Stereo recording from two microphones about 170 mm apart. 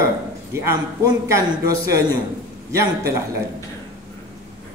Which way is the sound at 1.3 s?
20° right (ahead or behind).